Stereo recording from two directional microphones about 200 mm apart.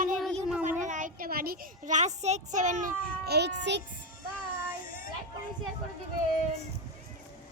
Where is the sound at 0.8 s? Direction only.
40° right (ahead or behind); by 3.8 s 60° right (ahead or behind).